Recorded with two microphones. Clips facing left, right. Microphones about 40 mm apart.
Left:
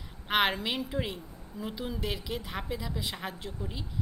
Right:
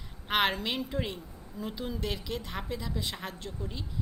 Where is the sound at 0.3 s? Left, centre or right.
Centre.